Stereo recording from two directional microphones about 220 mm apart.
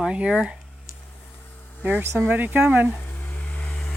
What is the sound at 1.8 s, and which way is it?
Speech, 10° right (ahead or behind).